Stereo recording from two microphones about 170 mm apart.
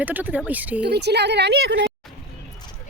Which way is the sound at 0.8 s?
80° right.